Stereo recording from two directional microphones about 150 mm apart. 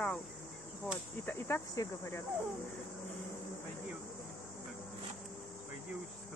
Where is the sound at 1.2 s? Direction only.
15° left (ahead or behind).